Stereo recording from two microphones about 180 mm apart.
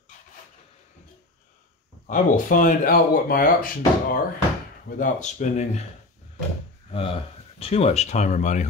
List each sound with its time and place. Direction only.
2.0 s speech: 45° left (ahead or behind)
6.9 s speech: 30° left (ahead or behind)